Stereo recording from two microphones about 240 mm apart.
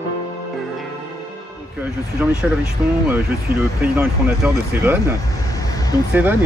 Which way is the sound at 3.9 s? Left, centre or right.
Centre.